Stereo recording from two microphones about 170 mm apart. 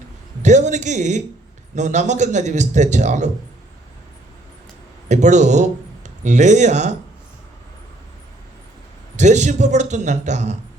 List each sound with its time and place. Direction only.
0.4 s a man's voice: 45° right (ahead or behind)
5.0 s a man's voice: 45° right (ahead or behind)
9.1 s a man's voice: 45° right (ahead or behind)